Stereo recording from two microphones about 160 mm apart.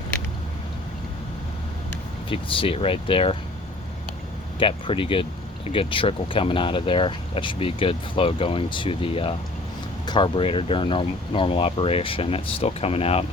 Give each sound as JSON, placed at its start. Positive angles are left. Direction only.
{"t": 2.3, "sound": "speech", "side_deg": 35}
{"t": 4.6, "sound": "speech", "side_deg": 35}